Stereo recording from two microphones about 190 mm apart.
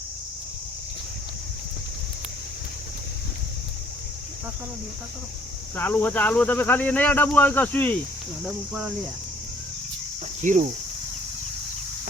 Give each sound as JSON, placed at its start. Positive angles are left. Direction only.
{"t": 5.7, "sound": "speech", "side_deg": 10}
{"t": 8.4, "sound": "speech", "side_deg": -5}
{"t": 10.4, "sound": "speech", "side_deg": -40}